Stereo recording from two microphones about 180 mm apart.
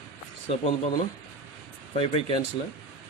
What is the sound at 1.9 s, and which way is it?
Speech, 30° left (ahead or behind).